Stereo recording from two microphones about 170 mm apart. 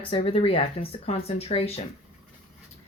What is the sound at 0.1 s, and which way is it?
Speech, 35° left (ahead or behind).